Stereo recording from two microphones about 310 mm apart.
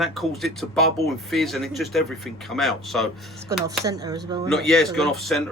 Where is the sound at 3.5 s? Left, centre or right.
Centre.